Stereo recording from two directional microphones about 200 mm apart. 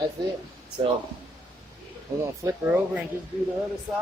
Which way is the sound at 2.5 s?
10° right (ahead or behind).